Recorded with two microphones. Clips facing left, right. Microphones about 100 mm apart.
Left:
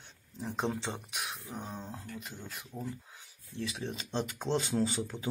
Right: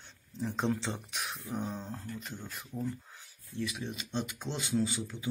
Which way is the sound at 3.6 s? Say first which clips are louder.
Right 1 dB; 30° left (ahead or behind).